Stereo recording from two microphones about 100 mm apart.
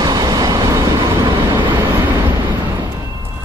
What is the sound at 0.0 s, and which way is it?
Train, 45° right (ahead or behind).